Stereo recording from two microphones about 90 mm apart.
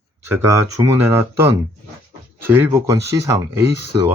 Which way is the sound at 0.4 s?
35° right (ahead or behind).